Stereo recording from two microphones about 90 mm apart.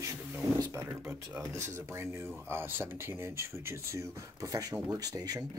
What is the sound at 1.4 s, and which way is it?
Speech, 30° right (ahead or behind).